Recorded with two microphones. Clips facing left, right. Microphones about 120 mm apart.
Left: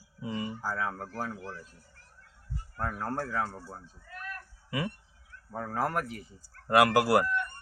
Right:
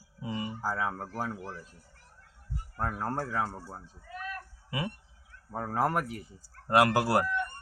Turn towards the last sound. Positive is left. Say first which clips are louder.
# left 2 dB
turn(degrees=-25)  # may be behind; listen again after turning